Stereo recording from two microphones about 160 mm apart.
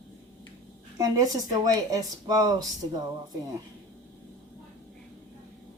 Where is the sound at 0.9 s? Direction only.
25° right (ahead or behind).